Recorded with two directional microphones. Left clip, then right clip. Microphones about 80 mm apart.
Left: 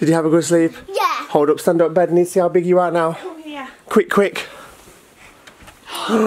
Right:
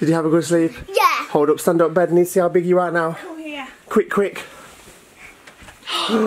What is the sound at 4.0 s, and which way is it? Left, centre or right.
Speech, left.